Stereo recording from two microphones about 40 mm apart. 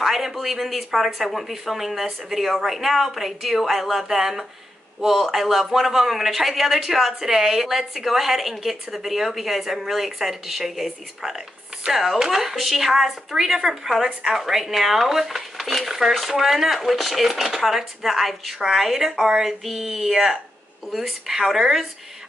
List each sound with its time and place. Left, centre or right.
0.0 s speech: centre